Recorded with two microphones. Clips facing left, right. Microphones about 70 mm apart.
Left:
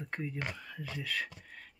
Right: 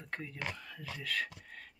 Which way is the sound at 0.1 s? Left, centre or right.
Centre.